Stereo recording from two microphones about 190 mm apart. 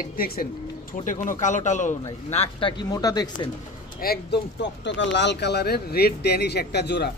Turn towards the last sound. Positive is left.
turn(degrees=60)  # may be behind; listen again after turning